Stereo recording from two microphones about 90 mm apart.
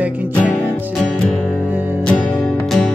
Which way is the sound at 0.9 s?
Centre (ahead or behind).